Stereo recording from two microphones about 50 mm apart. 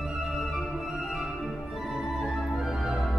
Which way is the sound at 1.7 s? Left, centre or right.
Centre.